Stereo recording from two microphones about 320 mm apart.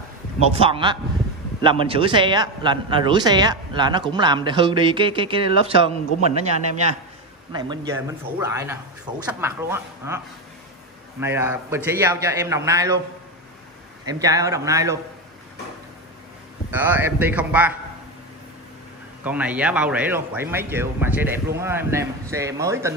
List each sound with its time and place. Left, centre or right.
0.4 s a man's voice: centre
7.5 s a man's voice: centre
14.0 s a man's voice: centre
16.7 s speech: centre
19.2 s a man's voice: centre